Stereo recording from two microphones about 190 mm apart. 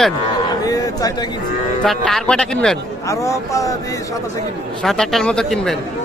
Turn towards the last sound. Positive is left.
turn(degrees=5)  # may be behind; listen again after turning